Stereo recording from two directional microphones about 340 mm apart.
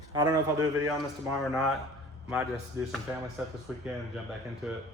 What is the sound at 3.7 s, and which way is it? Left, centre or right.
Speech, centre.